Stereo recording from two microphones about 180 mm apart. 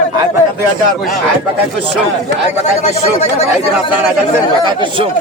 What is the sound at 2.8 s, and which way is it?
Speech, 40° left (ahead or behind).